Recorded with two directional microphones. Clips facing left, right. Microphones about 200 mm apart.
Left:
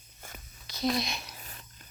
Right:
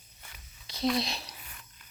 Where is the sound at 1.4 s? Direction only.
40° left (ahead or behind).